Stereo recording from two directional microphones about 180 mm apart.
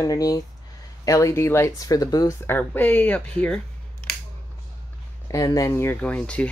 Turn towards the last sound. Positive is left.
turn(degrees=5)  # may be behind; listen again after turning